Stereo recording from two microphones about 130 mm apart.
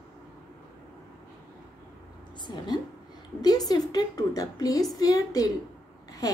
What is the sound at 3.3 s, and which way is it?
A woman's voice, 30° left (ahead or behind).